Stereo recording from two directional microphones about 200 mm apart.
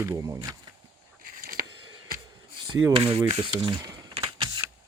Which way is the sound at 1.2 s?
45° right (ahead or behind).